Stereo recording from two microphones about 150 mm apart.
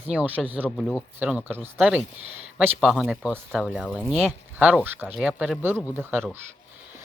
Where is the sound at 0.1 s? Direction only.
10° right (ahead or behind).